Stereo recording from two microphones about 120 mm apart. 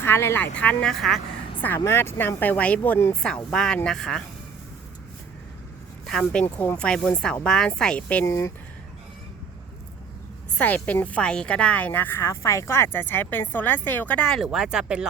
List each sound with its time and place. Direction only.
0.0 s speech: 20° left (ahead or behind); by 1.2 s centre (ahead or behind)
1.6 s speech: 20° left (ahead or behind)
6.1 s speech: 5° left (ahead or behind)
6.4 s speech: 15° left (ahead or behind)
8.2 s speech: 25° left (ahead or behind)
11.0 s speech: 10° left (ahead or behind); by 15.0 s 5° right (ahead or behind)